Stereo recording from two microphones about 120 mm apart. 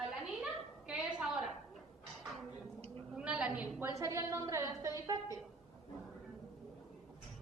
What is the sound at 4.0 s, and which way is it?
Speech, 25° right (ahead or behind).